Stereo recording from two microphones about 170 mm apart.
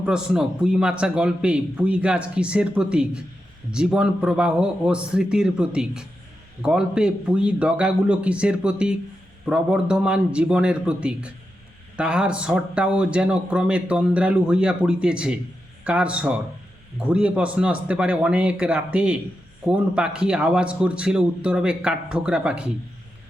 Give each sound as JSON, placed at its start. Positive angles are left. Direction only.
{"t": 0.0, "sound": "a man's voice", "side_deg": -5}